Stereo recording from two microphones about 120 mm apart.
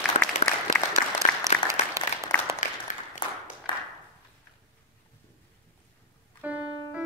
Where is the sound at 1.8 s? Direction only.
85° left.